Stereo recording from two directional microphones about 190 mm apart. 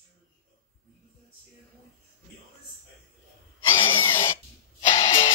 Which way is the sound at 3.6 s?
10° left (ahead or behind).